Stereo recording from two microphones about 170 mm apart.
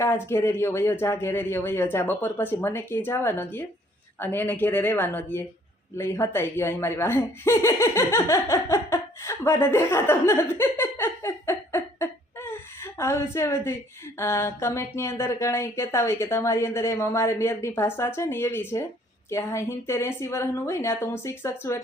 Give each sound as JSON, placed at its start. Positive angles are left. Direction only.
{"t": 0.0, "sound": "speech", "side_deg": 15}